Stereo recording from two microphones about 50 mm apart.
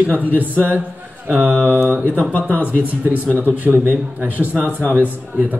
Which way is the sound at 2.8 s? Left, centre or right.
Right.